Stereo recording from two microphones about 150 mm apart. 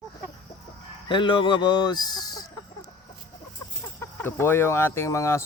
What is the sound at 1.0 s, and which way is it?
Speech, 35° left (ahead or behind).